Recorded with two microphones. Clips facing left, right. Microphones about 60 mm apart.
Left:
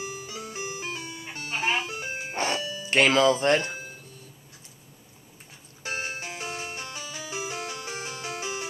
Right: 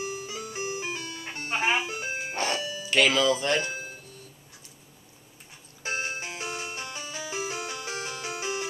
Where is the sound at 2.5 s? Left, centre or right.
Centre.